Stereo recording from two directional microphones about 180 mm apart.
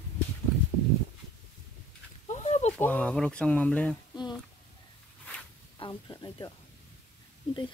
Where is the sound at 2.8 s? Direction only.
10° left (ahead or behind).